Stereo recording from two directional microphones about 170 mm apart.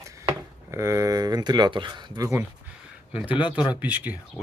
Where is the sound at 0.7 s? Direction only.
15° right (ahead or behind).